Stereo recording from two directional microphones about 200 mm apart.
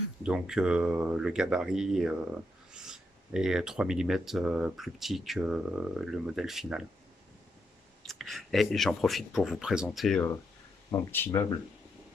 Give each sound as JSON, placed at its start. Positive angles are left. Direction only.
{"t": 0.3, "sound": "speech", "side_deg": -5}
{"t": 8.0, "sound": "speech", "side_deg": 0}
{"t": 11.1, "sound": "speech", "side_deg": 10}